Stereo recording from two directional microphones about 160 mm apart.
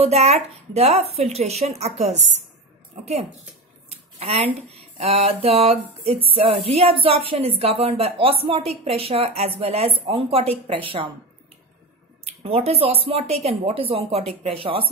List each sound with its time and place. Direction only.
0.0 s speech: 40° right (ahead or behind)
4.2 s speech: 40° right (ahead or behind)
12.3 s speech: 40° right (ahead or behind)